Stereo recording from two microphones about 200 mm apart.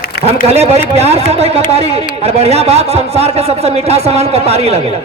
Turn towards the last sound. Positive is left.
turn(degrees=-30)  # may be behind; listen again after turning